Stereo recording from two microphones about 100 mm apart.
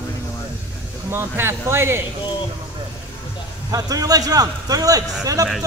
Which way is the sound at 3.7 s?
35° right (ahead or behind).